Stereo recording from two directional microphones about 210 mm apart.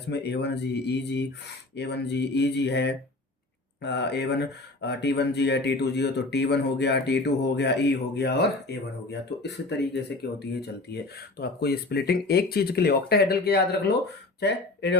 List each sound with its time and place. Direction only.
0.1 s speech: 55° left (ahead or behind)